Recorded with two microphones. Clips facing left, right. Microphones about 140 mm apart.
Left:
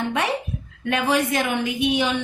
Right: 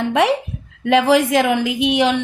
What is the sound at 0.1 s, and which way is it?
A woman's voice, 90° right.